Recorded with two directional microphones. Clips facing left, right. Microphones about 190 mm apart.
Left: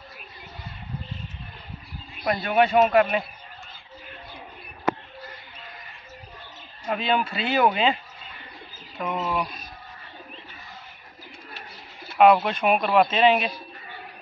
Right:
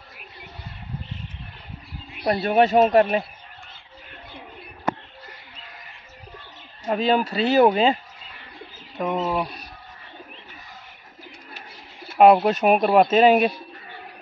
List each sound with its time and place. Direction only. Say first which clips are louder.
2.2 s speech: right 3 dB; 35° right (ahead or behind)
6.9 s speech: right 4 dB; 40° right (ahead or behind)
9.0 s speech: right 3 dB; 30° right (ahead or behind)
12.2 s a man's voice: right 3 dB; 35° right (ahead or behind)